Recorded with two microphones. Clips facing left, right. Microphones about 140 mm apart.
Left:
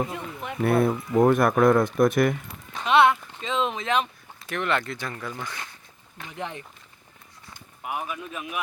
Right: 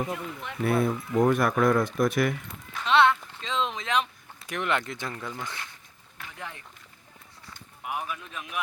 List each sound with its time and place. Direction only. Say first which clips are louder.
0.1 s speech: left 1 dB; 20° left (ahead or behind)
0.6 s speech: left 3 dB; 55° left (ahead or behind)
2.8 s a sound: left 2 dB; 15° left (ahead or behind)
4.4 s speech: left 2 dB; 15° right (ahead or behind)
6.1 s speech: left 6 dB; 20° left (ahead or behind)
7.9 s speech: left 2 dB; 5° left (ahead or behind)